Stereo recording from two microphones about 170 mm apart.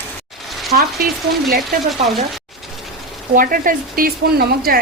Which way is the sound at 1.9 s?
Centre (ahead or behind).